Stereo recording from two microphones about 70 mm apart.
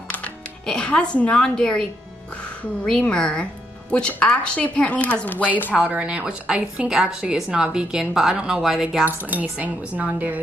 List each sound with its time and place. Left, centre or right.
0.1 s music: centre
1.1 s speech: centre
5.9 s speech: centre
9.0 s a woman's voice: right